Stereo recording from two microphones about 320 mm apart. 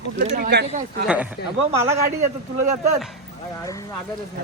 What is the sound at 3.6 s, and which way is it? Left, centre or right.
Speech, centre.